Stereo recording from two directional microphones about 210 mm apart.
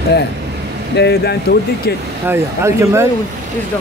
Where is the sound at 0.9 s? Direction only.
55° left (ahead or behind).